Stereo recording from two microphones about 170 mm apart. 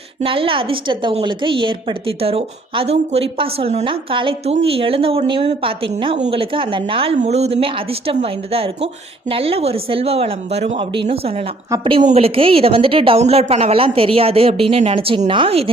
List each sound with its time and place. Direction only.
0.2 s a woman's voice: 30° right (ahead or behind)
6.1 s a woman's voice: 45° right (ahead or behind)
6.4 s a woman's voice: 30° right (ahead or behind)